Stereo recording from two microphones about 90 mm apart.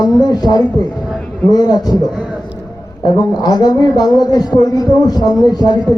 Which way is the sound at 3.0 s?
45° left (ahead or behind).